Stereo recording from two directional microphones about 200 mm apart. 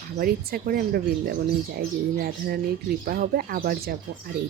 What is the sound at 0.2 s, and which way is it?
Speech, 50° right (ahead or behind).